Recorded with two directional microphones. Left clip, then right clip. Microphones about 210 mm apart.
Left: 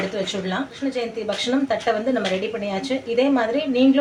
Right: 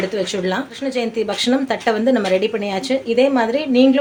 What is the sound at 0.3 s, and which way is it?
A woman's voice, 50° right (ahead or behind).